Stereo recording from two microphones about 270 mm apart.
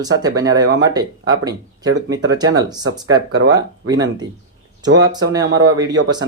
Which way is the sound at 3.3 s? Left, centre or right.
Right.